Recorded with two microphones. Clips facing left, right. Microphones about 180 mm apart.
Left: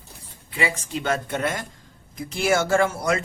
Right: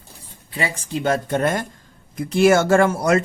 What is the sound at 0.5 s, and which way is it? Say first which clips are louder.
Speech: right 2 dB; 35° right (ahead or behind).